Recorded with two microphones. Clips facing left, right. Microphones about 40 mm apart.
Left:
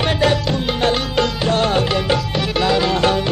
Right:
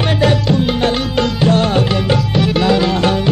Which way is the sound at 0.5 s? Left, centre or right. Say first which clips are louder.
Right 3 dB; centre.